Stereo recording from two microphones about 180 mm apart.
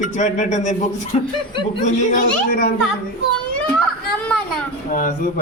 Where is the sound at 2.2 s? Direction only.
55° left (ahead or behind).